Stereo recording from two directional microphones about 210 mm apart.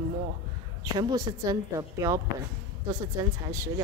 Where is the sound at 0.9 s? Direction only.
20° right (ahead or behind).